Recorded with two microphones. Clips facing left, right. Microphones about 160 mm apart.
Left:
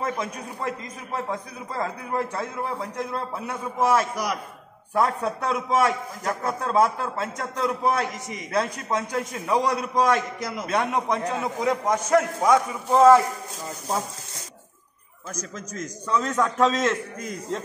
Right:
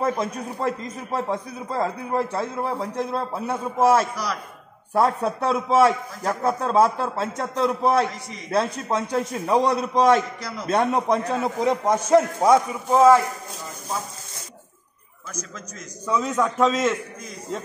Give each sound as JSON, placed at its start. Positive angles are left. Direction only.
{"t": 0.0, "sound": "a man's voice", "side_deg": -35}
{"t": 4.1, "sound": "a man's voice", "side_deg": 20}
{"t": 4.9, "sound": "a man's voice", "side_deg": -30}
{"t": 10.4, "sound": "a man's voice", "side_deg": 20}
{"t": 10.7, "sound": "a man's voice", "side_deg": -30}
{"t": 15.5, "sound": "a man's voice", "side_deg": 45}
{"t": 16.1, "sound": "a man's voice", "side_deg": -5}